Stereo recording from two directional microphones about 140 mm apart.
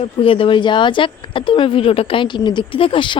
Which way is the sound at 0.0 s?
40° left (ahead or behind).